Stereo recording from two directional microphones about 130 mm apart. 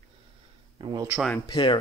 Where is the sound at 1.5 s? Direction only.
35° left (ahead or behind).